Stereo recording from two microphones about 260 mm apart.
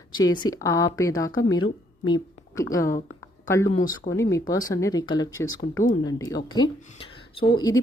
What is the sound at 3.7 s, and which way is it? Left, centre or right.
Speech, left.